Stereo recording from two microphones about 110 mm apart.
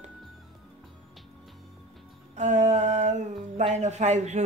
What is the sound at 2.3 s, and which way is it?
Speech, 90° right.